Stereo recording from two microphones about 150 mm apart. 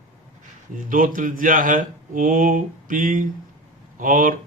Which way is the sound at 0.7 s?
65° right (ahead or behind).